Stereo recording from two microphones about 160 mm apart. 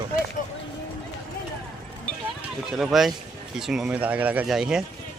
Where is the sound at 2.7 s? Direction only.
Centre (ahead or behind).